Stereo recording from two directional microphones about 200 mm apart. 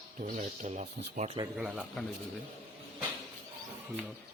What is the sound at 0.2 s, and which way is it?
Speech, 40° right (ahead or behind).